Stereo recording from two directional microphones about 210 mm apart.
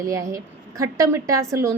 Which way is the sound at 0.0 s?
15° right (ahead or behind).